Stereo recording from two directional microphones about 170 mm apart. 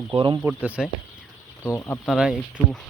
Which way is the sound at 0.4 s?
10° right (ahead or behind).